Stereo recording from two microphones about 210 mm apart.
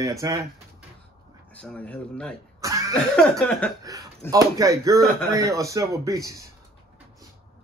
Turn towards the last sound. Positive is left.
turn(degrees=-15)  # may be behind; listen again after turning